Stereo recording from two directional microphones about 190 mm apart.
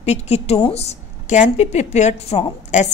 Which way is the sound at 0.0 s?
35° left (ahead or behind).